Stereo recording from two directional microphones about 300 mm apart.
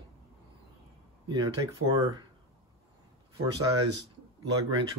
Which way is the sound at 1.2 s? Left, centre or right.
Centre.